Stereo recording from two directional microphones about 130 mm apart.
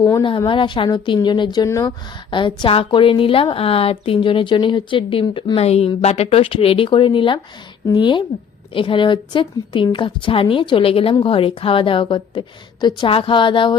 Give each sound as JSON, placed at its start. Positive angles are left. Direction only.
{"t": 0.2, "sound": "a woman's voice", "side_deg": 40}
{"t": 1.6, "sound": "speech", "side_deg": 25}
{"t": 2.3, "sound": "a woman's voice", "side_deg": 40}